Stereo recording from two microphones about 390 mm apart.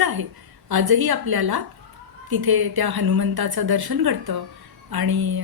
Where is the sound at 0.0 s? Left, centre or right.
Right.